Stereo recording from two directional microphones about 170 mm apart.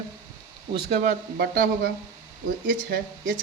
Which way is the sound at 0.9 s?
45° right (ahead or behind).